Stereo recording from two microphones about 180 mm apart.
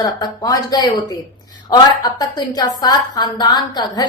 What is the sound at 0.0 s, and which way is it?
A woman's voice, 20° left (ahead or behind).